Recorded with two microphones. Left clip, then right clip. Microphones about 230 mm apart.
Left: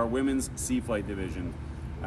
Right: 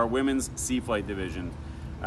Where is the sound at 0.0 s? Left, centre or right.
Centre.